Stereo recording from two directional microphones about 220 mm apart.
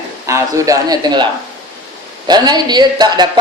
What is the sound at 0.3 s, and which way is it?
A man's voice, 15° right (ahead or behind).